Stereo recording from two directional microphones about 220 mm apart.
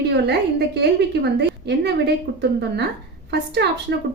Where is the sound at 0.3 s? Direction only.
50° right (ahead or behind).